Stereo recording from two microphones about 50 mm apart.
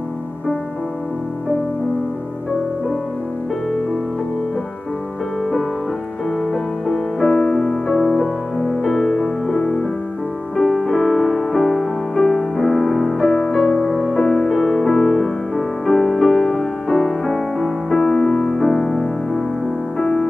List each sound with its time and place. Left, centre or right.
6.5 s music: centre